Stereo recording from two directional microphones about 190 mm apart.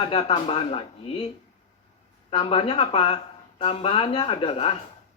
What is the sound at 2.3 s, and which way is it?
A woman's voice, 30° left (ahead or behind).